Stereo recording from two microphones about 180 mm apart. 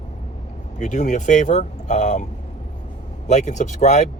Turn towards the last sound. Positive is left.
turn(degrees=40)  # may be behind; listen again after turning